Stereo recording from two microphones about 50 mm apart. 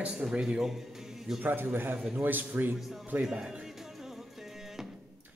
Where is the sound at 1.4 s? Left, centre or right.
Right.